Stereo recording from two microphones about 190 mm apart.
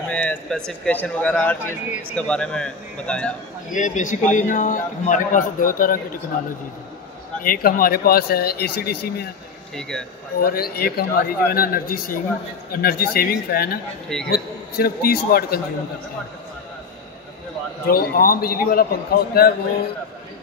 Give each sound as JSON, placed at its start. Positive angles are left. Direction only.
{"t": 0.1, "sound": "a man's voice", "side_deg": 5}
{"t": 3.7, "sound": "a man's voice", "side_deg": 40}
{"t": 7.4, "sound": "speech", "side_deg": 50}
{"t": 9.8, "sound": "a man's voice", "side_deg": 5}
{"t": 10.4, "sound": "speech", "side_deg": 50}
{"t": 17.8, "sound": "speech", "side_deg": 50}